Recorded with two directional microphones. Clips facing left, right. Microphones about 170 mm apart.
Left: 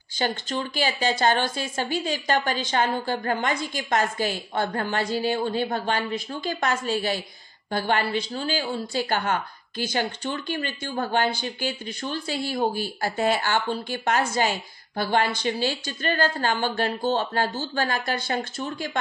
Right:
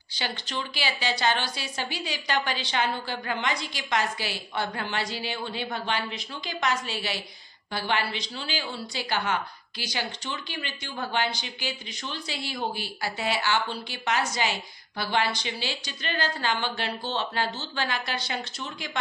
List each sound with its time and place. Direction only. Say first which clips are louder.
0.1 s a woman's voice: left 6 dB; 45° left (ahead or behind)